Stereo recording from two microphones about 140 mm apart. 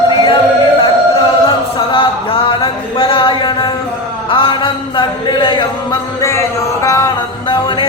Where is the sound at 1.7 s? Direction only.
35° left (ahead or behind).